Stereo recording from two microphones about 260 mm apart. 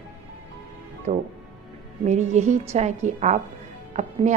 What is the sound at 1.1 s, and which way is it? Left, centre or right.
A woman's voice, right.